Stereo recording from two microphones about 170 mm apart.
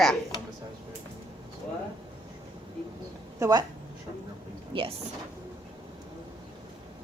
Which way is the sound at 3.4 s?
25° right (ahead or behind).